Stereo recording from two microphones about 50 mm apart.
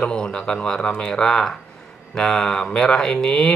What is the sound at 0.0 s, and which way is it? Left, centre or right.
Speech, centre.